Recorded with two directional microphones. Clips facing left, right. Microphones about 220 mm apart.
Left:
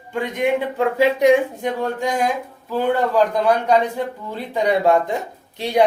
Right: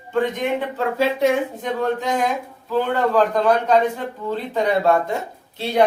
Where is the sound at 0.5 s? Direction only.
15° left (ahead or behind).